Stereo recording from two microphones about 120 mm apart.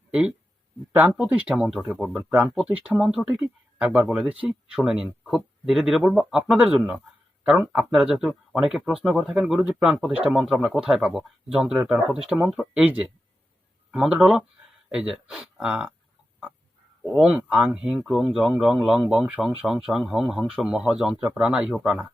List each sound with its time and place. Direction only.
0.1 s speech: 5° right (ahead or behind)
17.0 s speech: 10° right (ahead or behind)